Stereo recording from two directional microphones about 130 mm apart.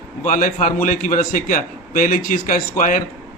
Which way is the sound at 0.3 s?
85° left.